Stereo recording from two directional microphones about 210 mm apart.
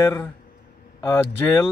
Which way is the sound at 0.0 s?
10° left (ahead or behind).